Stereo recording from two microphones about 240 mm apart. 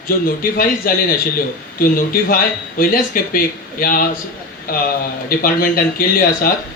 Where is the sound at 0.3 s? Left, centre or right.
Left.